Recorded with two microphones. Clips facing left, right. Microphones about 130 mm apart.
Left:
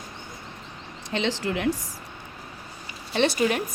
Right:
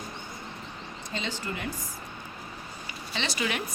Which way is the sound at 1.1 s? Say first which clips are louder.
Left 8 dB; 85° left.